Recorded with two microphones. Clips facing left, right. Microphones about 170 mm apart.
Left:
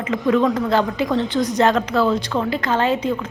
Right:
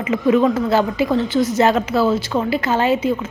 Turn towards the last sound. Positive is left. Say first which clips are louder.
# right 2 dB
turn(degrees=-5)  # may be behind; listen again after turning